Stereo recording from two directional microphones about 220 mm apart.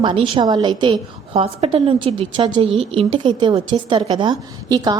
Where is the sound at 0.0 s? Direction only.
25° right (ahead or behind).